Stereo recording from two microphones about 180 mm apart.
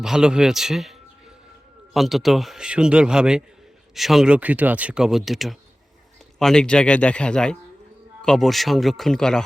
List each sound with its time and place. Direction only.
0.0 s speech: 5° right (ahead or behind)